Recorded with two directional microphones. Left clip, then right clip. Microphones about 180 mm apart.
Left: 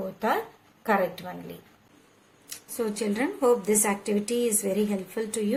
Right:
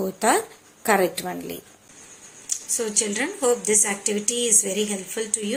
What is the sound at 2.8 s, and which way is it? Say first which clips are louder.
Speech: right 2 dB; 5° left (ahead or behind).